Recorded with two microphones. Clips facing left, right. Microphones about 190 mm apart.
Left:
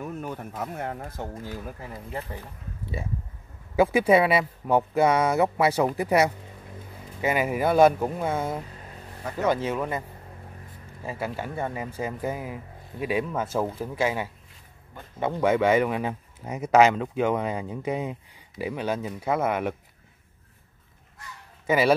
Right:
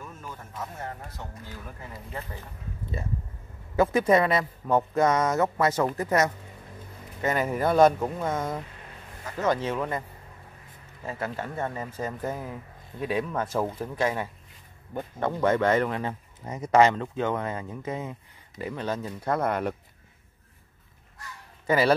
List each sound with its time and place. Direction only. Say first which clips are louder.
0.0 s a sound: left 8 dB; 65° left (ahead or behind)
0.6 s speech: left 3 dB; 60° left (ahead or behind)
3.7 s speech: left 2 dB; 10° left (ahead or behind)
21.6 s speech: left 1 dB; 5° left (ahead or behind)